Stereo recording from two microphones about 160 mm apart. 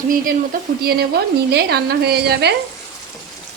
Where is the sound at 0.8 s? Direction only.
85° right.